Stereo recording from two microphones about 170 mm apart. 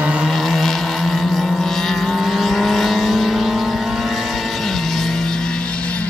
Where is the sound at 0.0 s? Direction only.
5° right (ahead or behind).